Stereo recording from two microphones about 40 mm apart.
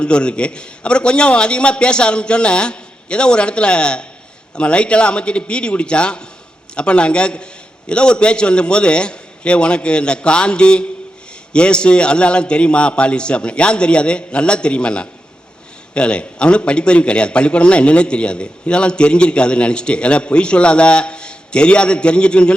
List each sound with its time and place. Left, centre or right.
0.0 s a man's voice: left